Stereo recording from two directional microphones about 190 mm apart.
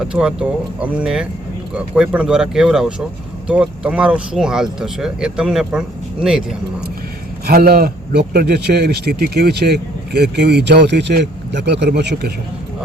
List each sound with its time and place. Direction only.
0.0 s speech: 5° right (ahead or behind)
7.4 s a man's voice: 55° right (ahead or behind)